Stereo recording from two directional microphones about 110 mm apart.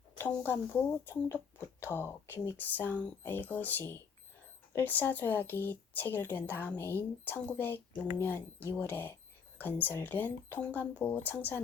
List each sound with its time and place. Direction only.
0.2 s speech: 20° left (ahead or behind)